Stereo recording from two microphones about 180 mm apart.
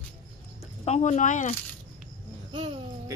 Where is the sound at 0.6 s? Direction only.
40° left (ahead or behind).